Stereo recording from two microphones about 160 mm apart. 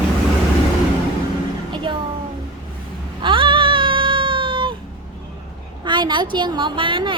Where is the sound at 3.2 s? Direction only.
30° right (ahead or behind).